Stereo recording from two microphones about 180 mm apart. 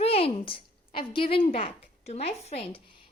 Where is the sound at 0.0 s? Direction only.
35° left (ahead or behind).